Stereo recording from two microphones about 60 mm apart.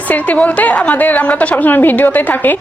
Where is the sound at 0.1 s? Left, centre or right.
Left.